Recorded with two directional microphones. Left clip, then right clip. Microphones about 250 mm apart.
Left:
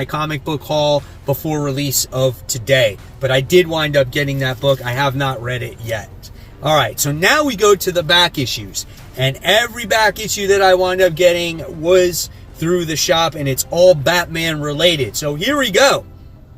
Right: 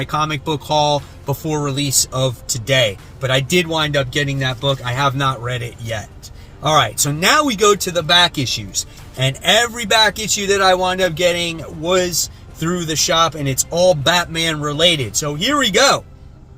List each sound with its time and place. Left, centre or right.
0.0 s speech: centre
12.5 s speech: centre